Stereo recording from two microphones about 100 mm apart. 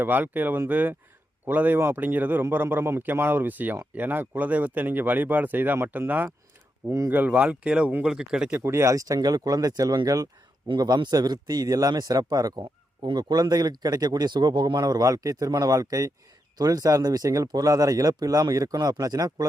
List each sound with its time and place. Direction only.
0.0 s speech: 20° right (ahead or behind)
8.5 s speech: 25° right (ahead or behind)